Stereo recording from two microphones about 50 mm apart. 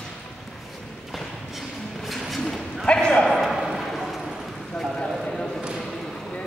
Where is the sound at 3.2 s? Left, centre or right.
Centre.